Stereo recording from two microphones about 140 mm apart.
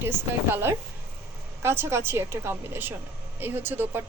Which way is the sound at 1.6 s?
20° right (ahead or behind).